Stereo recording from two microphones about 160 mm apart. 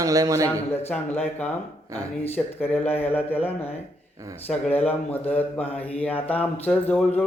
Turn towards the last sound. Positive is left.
turn(degrees=10)  # may be behind; listen again after turning